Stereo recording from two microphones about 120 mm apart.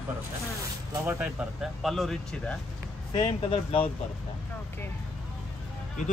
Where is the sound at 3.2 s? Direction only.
50° left (ahead or behind).